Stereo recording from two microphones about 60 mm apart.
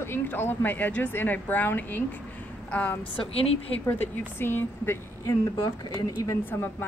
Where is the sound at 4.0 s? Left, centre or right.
Left.